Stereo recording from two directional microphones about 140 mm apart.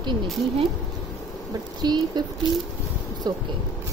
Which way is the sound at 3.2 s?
30° right (ahead or behind).